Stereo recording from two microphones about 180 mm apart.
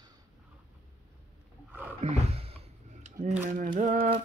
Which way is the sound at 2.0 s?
35° right (ahead or behind).